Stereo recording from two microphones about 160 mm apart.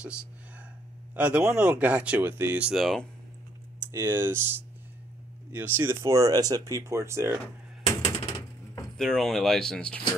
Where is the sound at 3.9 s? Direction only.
15° right (ahead or behind).